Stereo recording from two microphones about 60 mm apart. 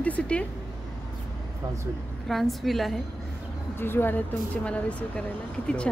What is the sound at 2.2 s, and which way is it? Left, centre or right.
Speech, centre.